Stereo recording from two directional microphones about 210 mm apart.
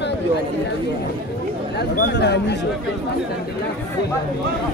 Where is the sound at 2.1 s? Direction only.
55° left (ahead or behind).